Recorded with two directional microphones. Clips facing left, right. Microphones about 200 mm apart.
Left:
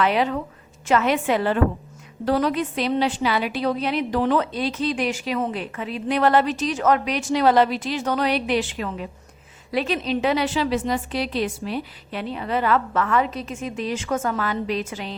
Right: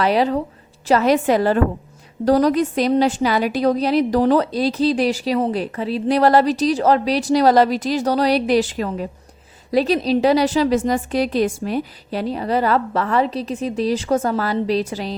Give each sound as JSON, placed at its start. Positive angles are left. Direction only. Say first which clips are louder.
{"t": 0.0, "sound": "a woman's voice", "louder": "right 4 dB", "side_deg": -35}